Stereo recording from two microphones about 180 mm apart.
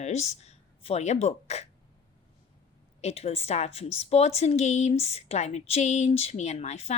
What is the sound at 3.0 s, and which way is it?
A woman's voice, 35° left (ahead or behind).